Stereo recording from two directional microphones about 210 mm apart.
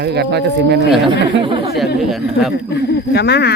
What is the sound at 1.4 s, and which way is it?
Speech, 25° right (ahead or behind).